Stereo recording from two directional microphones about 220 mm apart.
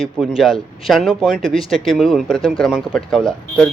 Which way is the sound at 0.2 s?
Centre (ahead or behind).